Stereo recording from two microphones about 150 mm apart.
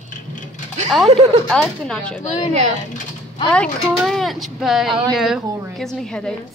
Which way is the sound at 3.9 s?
Centre (ahead or behind).